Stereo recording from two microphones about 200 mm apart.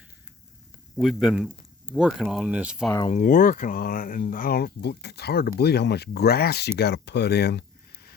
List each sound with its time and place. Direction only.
0.9 s speech: centre (ahead or behind)
3.1 s speech: 40° left (ahead or behind)